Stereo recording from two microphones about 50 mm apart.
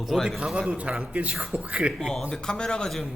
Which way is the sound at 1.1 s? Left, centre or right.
Right.